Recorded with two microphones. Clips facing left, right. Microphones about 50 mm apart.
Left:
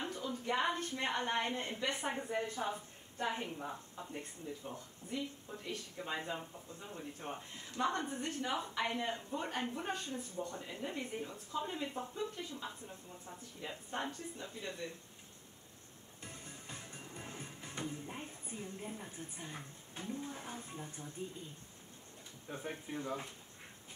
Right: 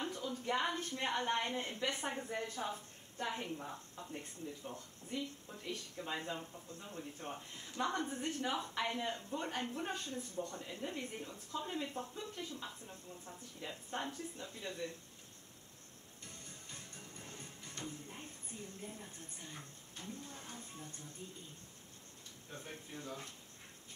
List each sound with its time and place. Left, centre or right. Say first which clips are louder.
0.0 s a sound: left 1 dB; centre
0.7 s speech: left 1 dB; centre
16.2 s music: left 4 dB; centre
22.5 s speech: left 6 dB; left